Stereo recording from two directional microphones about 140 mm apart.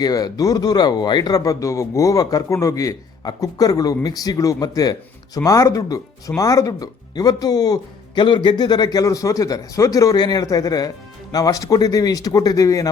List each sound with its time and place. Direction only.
0.0 s speech: 25° left (ahead or behind)